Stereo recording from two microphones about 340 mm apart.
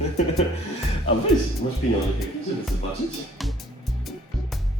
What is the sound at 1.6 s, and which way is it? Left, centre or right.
Speech, left.